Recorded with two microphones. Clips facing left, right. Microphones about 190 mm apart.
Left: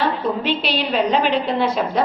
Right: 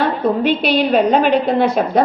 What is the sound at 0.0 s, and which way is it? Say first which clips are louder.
A woman's voice: right 5 dB; 50° right (ahead or behind).